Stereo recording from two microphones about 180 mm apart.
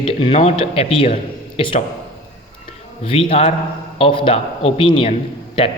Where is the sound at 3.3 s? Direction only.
35° left (ahead or behind).